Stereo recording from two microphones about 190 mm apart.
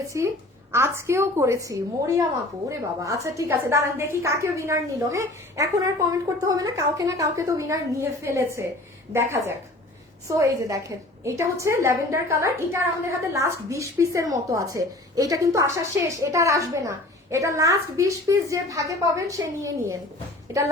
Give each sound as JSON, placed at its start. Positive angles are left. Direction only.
{"t": 0.1, "sound": "a woman's voice", "side_deg": -15}